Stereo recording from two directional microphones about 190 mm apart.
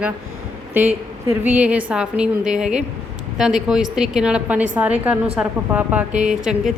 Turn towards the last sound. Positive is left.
turn(degrees=0)  # may be behind; listen again after turning